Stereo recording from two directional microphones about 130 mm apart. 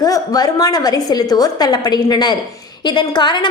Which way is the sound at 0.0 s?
30° left (ahead or behind).